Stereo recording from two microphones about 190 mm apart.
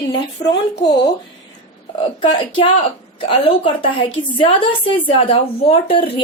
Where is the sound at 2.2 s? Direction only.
25° left (ahead or behind).